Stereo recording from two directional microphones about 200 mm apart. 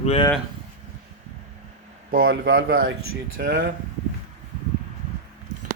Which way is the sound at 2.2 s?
70° right (ahead or behind).